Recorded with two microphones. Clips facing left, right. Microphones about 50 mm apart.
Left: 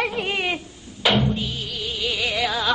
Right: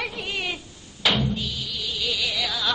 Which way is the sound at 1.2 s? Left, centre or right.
Left.